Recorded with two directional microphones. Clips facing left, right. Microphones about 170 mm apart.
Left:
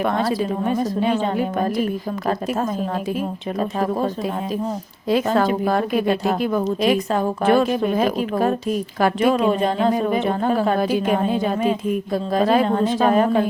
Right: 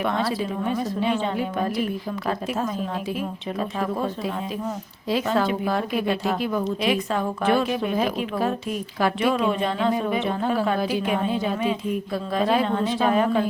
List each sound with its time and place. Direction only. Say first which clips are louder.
0.0 s a woman's voice: left 4 dB; 45° left (ahead or behind)